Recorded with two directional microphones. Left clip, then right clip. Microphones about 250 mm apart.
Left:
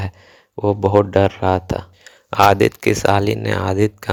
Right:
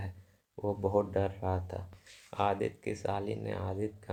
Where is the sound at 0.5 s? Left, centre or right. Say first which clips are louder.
Left 16 dB; left.